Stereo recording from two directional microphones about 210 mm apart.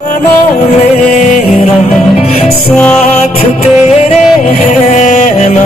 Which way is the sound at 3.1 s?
30° left (ahead or behind).